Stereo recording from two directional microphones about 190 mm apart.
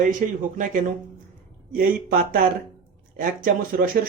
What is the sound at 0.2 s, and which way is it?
Speech, 45° right (ahead or behind).